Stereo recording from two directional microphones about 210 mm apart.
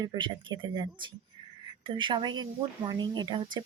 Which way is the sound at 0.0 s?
20° right (ahead or behind).